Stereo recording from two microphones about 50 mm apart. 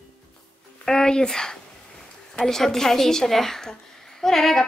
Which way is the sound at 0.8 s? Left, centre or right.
Centre.